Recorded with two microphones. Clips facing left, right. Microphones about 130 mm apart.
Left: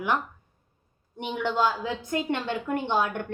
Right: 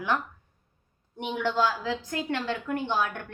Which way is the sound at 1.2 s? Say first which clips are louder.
Even; centre (ahead or behind).